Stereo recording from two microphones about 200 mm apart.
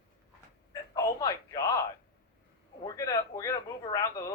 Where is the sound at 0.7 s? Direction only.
15° left (ahead or behind).